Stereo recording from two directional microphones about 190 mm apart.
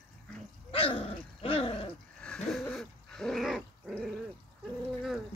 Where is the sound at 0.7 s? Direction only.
30° left (ahead or behind).